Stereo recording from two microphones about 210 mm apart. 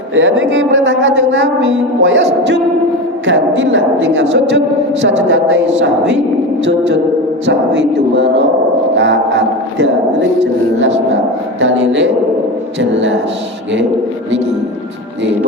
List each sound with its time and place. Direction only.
0.1 s speech: 65° right (ahead or behind)
3.2 s speech: 65° right (ahead or behind)